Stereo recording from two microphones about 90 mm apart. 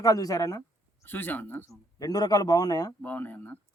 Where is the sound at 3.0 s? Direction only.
20° left (ahead or behind).